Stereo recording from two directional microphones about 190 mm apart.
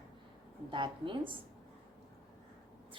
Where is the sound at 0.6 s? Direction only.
25° right (ahead or behind).